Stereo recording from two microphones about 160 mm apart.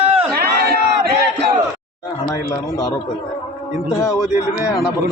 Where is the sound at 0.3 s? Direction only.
80° right.